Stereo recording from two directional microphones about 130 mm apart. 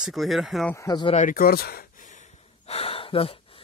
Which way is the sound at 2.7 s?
50° left (ahead or behind).